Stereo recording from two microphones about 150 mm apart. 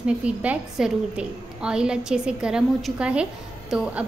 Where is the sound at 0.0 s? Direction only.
10° right (ahead or behind).